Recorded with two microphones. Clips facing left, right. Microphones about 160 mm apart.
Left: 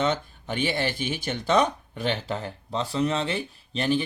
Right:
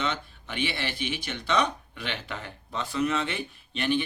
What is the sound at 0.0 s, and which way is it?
Speech, 40° left (ahead or behind).